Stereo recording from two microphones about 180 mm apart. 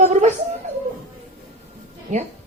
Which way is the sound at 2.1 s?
40° right (ahead or behind).